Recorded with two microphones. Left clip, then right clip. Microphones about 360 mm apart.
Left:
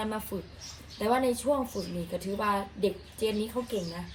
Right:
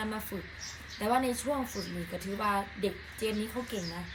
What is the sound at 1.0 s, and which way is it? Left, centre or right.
A woman's voice, centre.